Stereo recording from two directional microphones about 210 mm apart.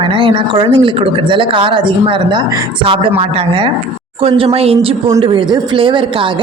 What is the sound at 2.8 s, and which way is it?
Speech, 25° right (ahead or behind).